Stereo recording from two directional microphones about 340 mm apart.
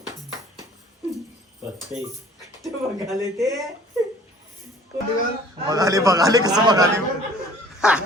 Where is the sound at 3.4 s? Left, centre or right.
Centre.